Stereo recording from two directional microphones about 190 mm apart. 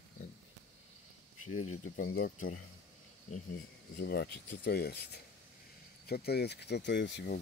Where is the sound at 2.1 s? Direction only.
50° left (ahead or behind).